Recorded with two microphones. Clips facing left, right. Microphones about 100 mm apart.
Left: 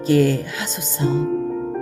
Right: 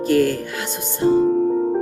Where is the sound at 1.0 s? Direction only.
25° right (ahead or behind).